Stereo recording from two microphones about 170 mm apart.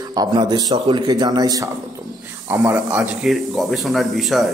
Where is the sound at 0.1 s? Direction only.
25° right (ahead or behind).